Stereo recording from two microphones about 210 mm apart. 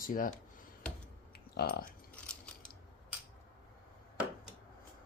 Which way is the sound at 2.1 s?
5° left (ahead or behind).